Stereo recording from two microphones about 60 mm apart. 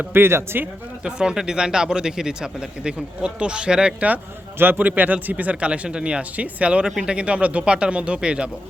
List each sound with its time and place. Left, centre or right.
0.0 s speech: right
1.0 s speech: centre
4.5 s speech: right; by 8.4 s centre